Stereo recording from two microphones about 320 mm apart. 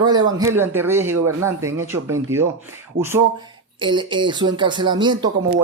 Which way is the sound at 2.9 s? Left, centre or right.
Right.